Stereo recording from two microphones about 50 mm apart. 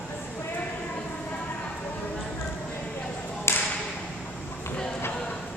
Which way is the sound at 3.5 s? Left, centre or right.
Left.